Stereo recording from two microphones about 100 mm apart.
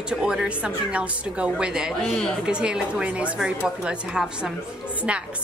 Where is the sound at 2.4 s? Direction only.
10° right (ahead or behind).